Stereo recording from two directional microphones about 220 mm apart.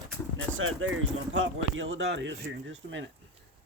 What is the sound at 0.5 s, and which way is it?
Speech, 65° right (ahead or behind).